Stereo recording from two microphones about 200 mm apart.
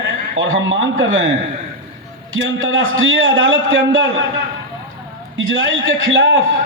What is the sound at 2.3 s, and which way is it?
A man's voice, 80° right.